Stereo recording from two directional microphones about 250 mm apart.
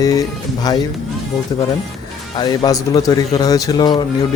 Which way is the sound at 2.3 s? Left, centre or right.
Centre.